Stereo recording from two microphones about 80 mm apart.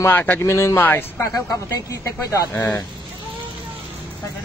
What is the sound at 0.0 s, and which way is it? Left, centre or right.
Speech, left.